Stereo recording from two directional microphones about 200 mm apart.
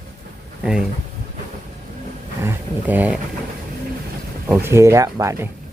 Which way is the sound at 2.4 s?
10° right (ahead or behind).